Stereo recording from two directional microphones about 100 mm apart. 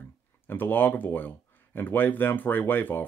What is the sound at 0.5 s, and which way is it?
Speech, 20° left (ahead or behind).